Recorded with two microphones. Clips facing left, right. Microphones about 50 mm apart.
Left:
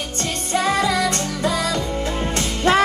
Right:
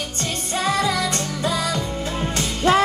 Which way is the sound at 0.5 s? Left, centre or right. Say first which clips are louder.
Left 2 dB; left.